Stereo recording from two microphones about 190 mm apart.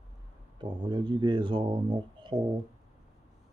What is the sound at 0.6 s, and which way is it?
Speech, 25° right (ahead or behind).